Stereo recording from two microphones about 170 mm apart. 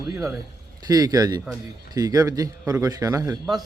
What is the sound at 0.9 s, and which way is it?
A man's voice, 20° right (ahead or behind).